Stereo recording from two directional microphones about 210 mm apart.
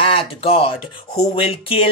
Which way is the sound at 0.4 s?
25° left (ahead or behind).